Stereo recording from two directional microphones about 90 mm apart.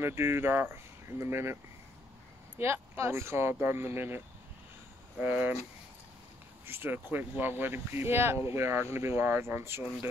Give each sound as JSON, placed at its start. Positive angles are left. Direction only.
{"t": 0.0, "sound": "speech", "side_deg": -25}
{"t": 2.6, "sound": "speech", "side_deg": -30}
{"t": 5.2, "sound": "speech", "side_deg": -20}
{"t": 6.6, "sound": "speech", "side_deg": -25}